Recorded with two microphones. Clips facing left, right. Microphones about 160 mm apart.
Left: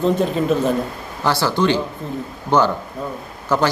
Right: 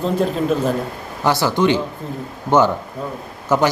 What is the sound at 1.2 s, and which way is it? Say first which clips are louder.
A man's voice: right 1 dB; 15° right (ahead or behind).